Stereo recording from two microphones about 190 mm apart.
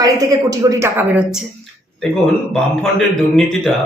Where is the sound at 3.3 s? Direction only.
5° left (ahead or behind).